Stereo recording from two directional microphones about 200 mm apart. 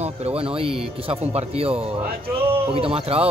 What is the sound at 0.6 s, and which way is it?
Speech, 30° right (ahead or behind).